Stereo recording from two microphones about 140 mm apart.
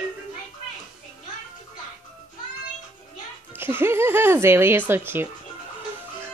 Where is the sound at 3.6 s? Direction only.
15° right (ahead or behind).